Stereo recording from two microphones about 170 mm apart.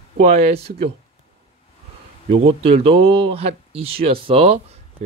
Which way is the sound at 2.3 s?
35° right (ahead or behind).